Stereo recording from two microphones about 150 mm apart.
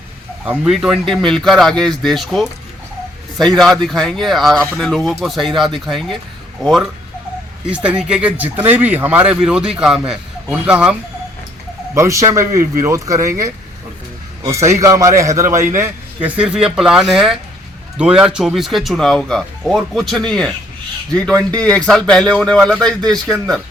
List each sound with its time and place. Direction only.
0.4 s a man's voice: 10° right (ahead or behind)
11.9 s a man's voice: 20° right (ahead or behind)
16.4 s speech: 5° right (ahead or behind)
21.6 s speech: 5° left (ahead or behind)